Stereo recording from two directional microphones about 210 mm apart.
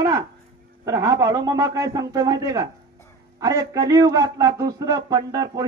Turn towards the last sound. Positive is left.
turn(degrees=-20)  # may be behind; listen again after turning